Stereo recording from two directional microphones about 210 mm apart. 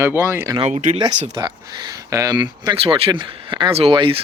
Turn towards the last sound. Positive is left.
turn(degrees=-25)  # may be behind; listen again after turning